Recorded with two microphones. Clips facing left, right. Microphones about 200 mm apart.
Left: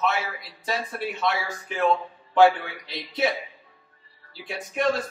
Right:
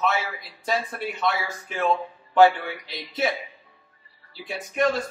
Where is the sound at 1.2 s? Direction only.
Centre (ahead or behind).